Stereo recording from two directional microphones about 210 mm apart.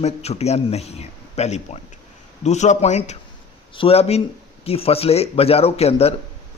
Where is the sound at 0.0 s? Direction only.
30° left (ahead or behind).